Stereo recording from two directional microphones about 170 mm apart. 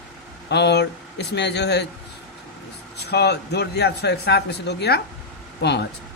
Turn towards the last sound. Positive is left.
turn(degrees=85)